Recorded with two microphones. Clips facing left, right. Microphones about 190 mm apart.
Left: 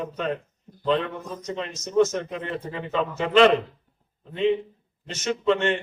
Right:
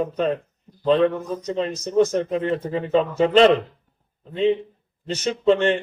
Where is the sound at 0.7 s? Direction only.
50° left (ahead or behind).